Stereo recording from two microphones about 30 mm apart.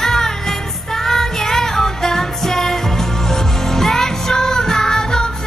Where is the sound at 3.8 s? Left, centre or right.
Centre.